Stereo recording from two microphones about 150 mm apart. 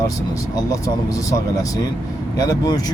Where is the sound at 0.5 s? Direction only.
25° left (ahead or behind).